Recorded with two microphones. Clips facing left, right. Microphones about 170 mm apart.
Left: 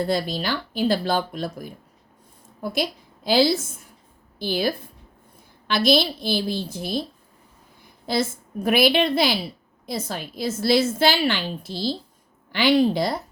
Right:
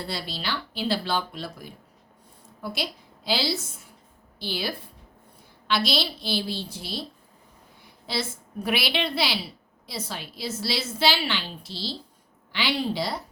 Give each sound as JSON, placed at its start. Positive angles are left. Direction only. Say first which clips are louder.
{"t": 0.0, "sound": "a woman's voice", "louder": "left 9 dB", "side_deg": 45}
{"t": 3.2, "sound": "a woman's voice", "louder": "left 8 dB", "side_deg": 50}
{"t": 8.0, "sound": "a woman's voice", "louder": "left 7 dB", "side_deg": 45}